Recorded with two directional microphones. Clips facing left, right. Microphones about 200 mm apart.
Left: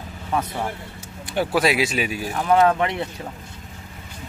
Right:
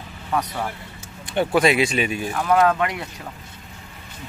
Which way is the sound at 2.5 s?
25° left (ahead or behind).